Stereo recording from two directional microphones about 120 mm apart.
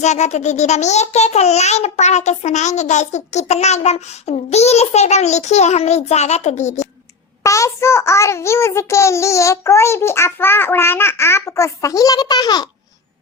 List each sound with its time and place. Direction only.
0.0 s a child's voice: 75° left (ahead or behind)
7.4 s child singing: 25° left (ahead or behind)